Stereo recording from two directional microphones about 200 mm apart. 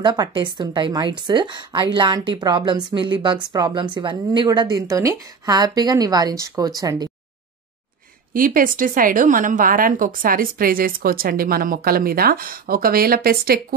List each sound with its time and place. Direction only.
0.0 s speech: 20° right (ahead or behind)
8.3 s a woman's voice: 45° right (ahead or behind)